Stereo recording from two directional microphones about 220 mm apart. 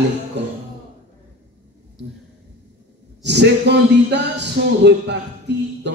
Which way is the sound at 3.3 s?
50° right (ahead or behind).